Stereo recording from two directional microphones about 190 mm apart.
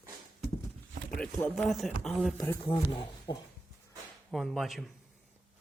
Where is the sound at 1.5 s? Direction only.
Centre (ahead or behind).